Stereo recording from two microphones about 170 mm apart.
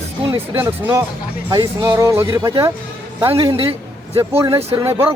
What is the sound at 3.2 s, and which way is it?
Speech, 35° right (ahead or behind).